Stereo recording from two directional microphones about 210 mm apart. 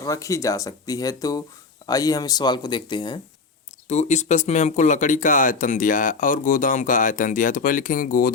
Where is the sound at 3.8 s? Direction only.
30° left (ahead or behind).